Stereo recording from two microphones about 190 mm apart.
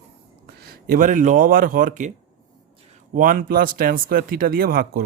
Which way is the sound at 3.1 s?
50° right (ahead or behind).